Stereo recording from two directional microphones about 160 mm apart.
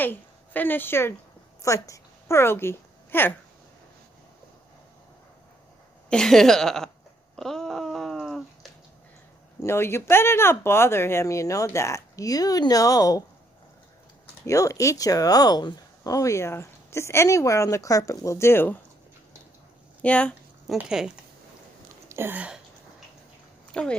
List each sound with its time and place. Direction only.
0.0 s a woman's voice: 10° left (ahead or behind)
6.1 s a woman's voice: 5° left (ahead or behind)
7.3 s a sound: 5° left (ahead or behind)
9.6 s speech: 15° left (ahead or behind)
14.4 s speech: 20° left (ahead or behind)
20.0 s a sound: 10° left (ahead or behind)
20.7 s a woman's voice: 5° right (ahead or behind)
22.1 s a sound: 15° right (ahead or behind)
23.7 s speech: 5° left (ahead or behind)